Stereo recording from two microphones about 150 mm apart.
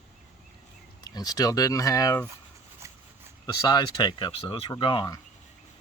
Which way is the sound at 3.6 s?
30° left (ahead or behind).